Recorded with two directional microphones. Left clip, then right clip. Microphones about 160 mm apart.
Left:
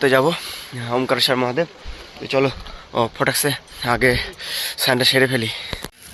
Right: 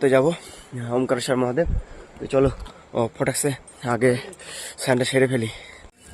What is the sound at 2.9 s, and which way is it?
Speech, 10° right (ahead or behind).